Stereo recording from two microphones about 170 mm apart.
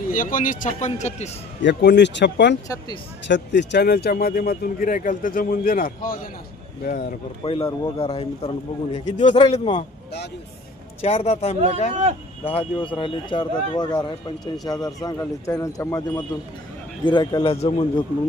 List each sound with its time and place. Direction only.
0.1 s speech: 50° left (ahead or behind)
1.6 s speech: 90° left
2.6 s a man's voice: 25° left (ahead or behind)
3.2 s speech: 90° left; by 7.1 s 55° left (ahead or behind)
7.4 s speech: 35° left (ahead or behind)
9.4 s speech: 30° left (ahead or behind)
11.0 s a man's voice: 35° left (ahead or behind)